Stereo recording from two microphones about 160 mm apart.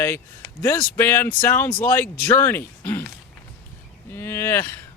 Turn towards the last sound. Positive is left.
turn(degrees=15)  # may be behind; listen again after turning